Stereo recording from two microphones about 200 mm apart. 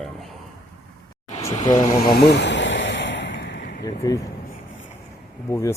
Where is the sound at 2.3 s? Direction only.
60° left (ahead or behind).